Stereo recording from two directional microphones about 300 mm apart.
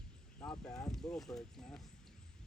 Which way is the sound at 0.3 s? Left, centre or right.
Centre.